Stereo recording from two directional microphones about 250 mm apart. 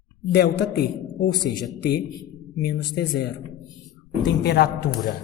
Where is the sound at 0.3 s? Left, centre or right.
Left.